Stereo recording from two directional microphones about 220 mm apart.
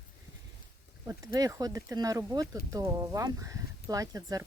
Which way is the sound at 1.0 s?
15° right (ahead or behind).